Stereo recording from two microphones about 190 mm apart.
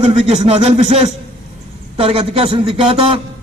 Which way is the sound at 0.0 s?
35° right (ahead or behind).